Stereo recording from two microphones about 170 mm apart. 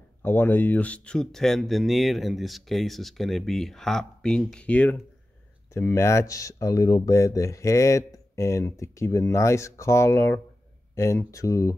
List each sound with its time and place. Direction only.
0.2 s speech: 10° left (ahead or behind)